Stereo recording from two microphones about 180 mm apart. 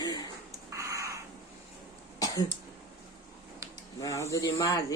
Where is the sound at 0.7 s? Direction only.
15° right (ahead or behind).